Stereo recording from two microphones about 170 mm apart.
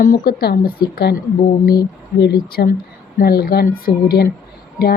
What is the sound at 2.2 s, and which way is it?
A woman's voice, 70° left (ahead or behind).